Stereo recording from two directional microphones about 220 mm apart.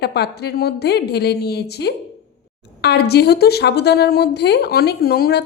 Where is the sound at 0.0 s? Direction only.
45° left (ahead or behind).